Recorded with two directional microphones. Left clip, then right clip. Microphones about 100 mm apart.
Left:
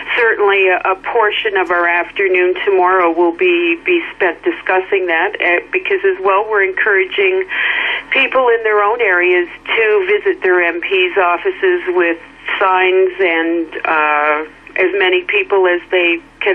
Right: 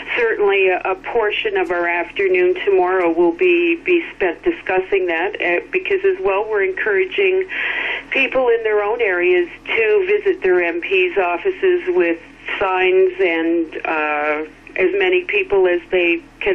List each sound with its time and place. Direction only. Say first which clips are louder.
0.1 s radio: left 5 dB; 30° left (ahead or behind)
0.4 s speech: left 4 dB; 40° left (ahead or behind)
3.1 s a sound: left 2 dB; 90° left
3.3 s speech: left 2 dB; 40° left (ahead or behind)